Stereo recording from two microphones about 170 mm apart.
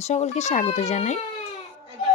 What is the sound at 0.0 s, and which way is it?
Speech, 40° left (ahead or behind).